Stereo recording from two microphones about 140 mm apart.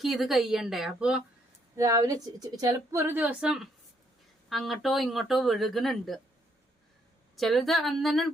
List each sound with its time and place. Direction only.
0.0 s speech: centre (ahead or behind)
1.7 s a woman's voice: 20° right (ahead or behind); by 6.1 s centre (ahead or behind)
7.3 s speech: centre (ahead or behind)